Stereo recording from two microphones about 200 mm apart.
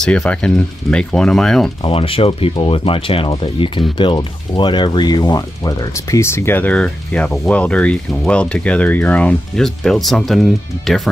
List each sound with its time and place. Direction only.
0.0 s speech: 5° left (ahead or behind)
1.8 s speech: 25° left (ahead or behind); by 11.0 s centre (ahead or behind)